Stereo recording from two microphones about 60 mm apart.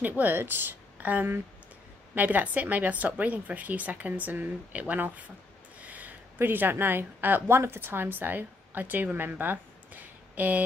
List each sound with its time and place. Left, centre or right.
0.2 s speech: right
0.9 s a woman's voice: right